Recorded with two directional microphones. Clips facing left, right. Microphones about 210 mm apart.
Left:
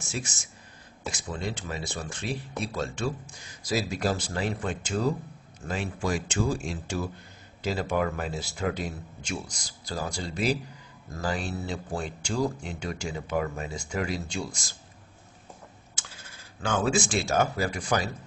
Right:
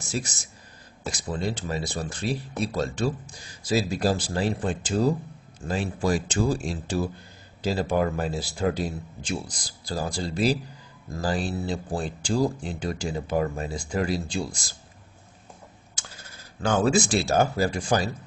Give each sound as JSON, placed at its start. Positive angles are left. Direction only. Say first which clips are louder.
{"t": 0.0, "sound": "speech", "louder": "right 4 dB", "side_deg": -35}
{"t": 15.9, "sound": "speech", "louder": "right 2 dB", "side_deg": -40}